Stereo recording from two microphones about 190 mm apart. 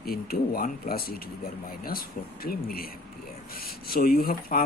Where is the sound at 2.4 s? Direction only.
50° left (ahead or behind).